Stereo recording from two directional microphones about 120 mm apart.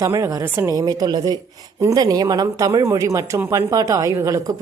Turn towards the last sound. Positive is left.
turn(degrees=-25)  # may be behind; listen again after turning